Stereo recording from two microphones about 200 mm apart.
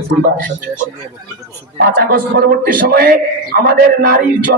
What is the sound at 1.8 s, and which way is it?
A man's voice, 50° right (ahead or behind).